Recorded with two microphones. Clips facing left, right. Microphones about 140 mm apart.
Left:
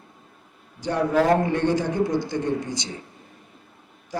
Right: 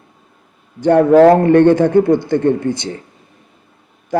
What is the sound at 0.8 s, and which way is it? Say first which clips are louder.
A man's voice: right 13 dB; 55° right (ahead or behind).